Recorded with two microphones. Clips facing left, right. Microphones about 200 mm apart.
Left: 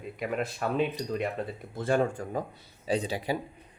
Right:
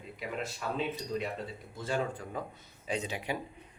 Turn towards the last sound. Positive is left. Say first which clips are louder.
# left 6 dB
turn(degrees=35)  # may be behind; listen again after turning